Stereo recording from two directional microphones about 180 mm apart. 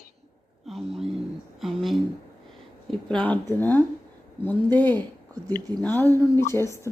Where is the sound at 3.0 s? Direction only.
5° left (ahead or behind).